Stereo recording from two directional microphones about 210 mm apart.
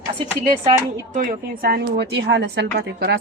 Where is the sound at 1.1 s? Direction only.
40° right (ahead or behind).